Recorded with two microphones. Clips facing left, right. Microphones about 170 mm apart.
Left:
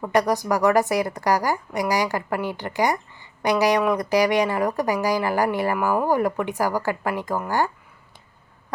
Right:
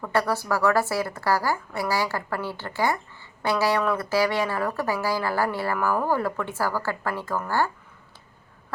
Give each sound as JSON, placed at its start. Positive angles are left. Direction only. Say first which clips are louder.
{"t": 0.0, "sound": "a woman's voice", "louder": "left 4 dB", "side_deg": 15}